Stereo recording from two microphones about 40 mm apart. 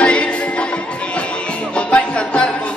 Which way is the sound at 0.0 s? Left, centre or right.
Left.